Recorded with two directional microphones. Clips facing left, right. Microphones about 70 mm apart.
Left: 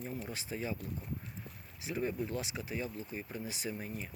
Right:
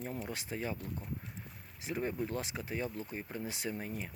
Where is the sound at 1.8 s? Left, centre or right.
Right.